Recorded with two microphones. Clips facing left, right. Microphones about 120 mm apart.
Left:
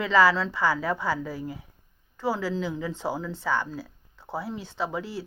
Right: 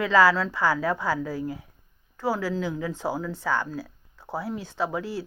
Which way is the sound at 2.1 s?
10° right (ahead or behind).